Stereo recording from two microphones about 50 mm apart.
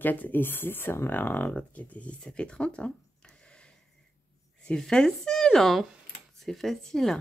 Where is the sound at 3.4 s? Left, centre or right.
Centre.